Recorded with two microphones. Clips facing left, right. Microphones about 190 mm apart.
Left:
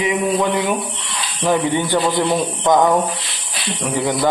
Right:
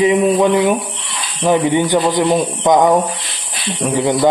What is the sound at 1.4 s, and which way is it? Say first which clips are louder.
Speech: right 4 dB; 15° right (ahead or behind).